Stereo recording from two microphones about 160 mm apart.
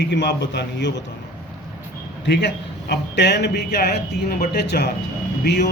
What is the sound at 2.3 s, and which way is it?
A man's voice, 90° left.